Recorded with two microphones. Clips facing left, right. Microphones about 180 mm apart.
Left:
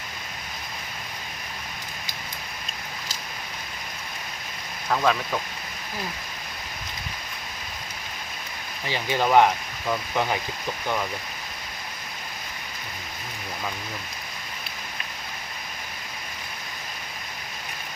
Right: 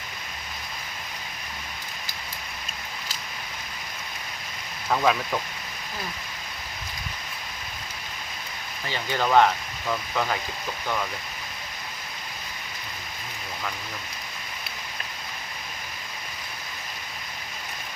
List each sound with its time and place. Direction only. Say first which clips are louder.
4.9 s speech: even; 5° right (ahead or behind)
8.9 s speech: left 2 dB; 15° left (ahead or behind)